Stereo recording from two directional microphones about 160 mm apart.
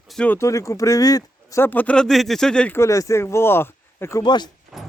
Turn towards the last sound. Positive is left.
turn(degrees=25)  # may be behind; listen again after turning